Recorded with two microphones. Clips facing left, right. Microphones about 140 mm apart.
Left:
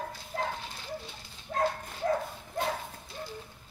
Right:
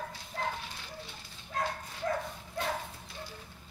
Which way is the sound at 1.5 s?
40° left (ahead or behind).